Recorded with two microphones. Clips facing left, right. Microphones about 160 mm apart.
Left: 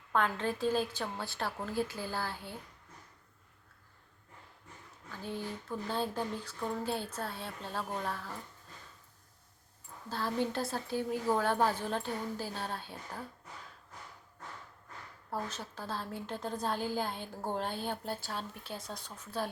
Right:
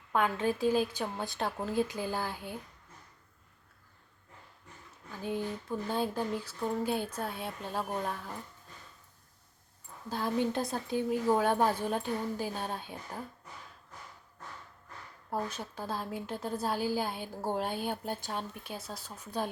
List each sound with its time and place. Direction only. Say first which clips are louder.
0.1 s a woman's voice: right 2 dB; 10° right (ahead or behind)
5.2 s a woman's voice: right 5 dB; 15° right (ahead or behind)
10.1 s a woman's voice: right 3 dB; 15° right (ahead or behind)
15.3 s a woman's voice: right 3 dB; 10° right (ahead or behind)